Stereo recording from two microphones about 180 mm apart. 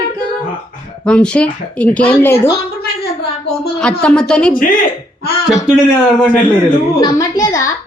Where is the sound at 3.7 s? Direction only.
5° left (ahead or behind).